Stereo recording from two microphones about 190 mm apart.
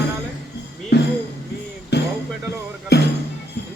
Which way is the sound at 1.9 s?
60° left (ahead or behind).